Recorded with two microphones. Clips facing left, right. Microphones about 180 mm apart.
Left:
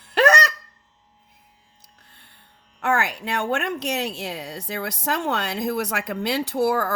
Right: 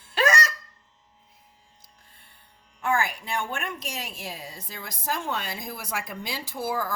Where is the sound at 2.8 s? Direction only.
70° left (ahead or behind).